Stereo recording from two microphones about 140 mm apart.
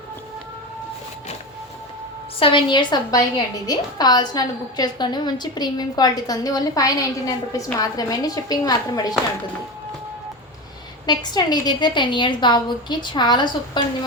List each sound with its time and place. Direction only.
2.4 s a woman's voice: 35° left (ahead or behind)
11.0 s a woman's voice: 30° left (ahead or behind)